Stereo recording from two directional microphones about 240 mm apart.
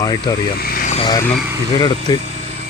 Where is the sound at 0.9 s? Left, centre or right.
Centre.